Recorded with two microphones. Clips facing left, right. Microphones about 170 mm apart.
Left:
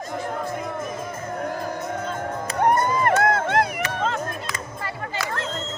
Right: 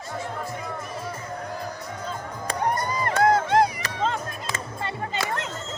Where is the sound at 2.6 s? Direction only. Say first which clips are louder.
Left 6 dB; 55° left (ahead or behind).